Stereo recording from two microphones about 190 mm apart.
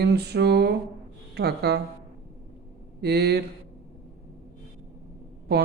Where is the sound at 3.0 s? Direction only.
60° right (ahead or behind).